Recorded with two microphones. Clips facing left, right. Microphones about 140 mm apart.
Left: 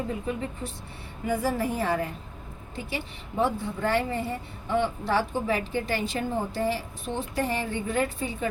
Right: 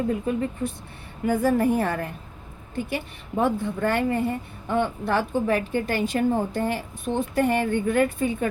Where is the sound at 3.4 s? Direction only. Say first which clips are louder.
Right 3 dB; 55° right (ahead or behind).